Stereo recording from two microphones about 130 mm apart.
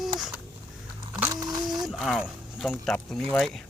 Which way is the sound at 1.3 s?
30° right (ahead or behind).